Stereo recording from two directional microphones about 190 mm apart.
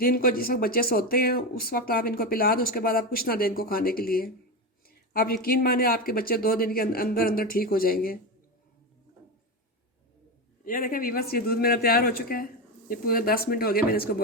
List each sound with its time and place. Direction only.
0.0 s speech: 50° left (ahead or behind)
10.7 s speech: 50° left (ahead or behind)